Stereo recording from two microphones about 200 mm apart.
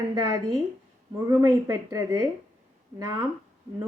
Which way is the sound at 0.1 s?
20° right (ahead or behind).